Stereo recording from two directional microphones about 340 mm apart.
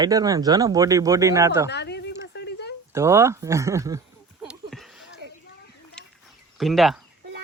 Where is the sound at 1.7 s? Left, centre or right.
Left.